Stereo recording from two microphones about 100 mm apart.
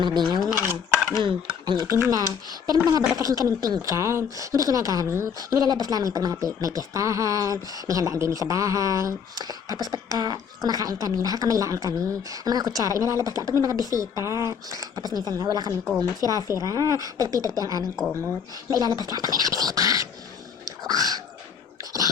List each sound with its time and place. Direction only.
0.0 s speech: 50° right (ahead or behind)
0.5 s cutlery: 20° right (ahead or behind)
1.2 s speech: 45° right (ahead or behind)
1.9 s speech: 30° right (ahead or behind)
20.7 s a sound: 40° right (ahead or behind)